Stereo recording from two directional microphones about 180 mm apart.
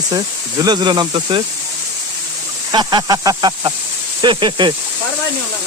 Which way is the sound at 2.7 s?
20° right (ahead or behind).